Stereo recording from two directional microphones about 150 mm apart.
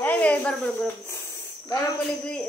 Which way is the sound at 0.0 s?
10° left (ahead or behind).